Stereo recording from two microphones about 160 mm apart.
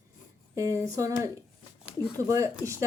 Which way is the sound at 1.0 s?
20° right (ahead or behind).